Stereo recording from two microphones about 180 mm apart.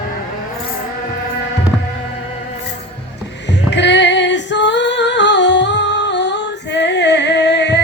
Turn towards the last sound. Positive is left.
turn(degrees=70)  # may be behind; listen again after turning